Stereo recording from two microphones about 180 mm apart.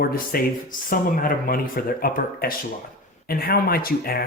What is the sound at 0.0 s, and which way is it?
Speech, 55° left (ahead or behind).